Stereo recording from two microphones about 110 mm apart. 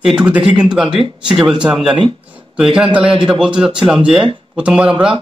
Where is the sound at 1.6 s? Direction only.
5° right (ahead or behind).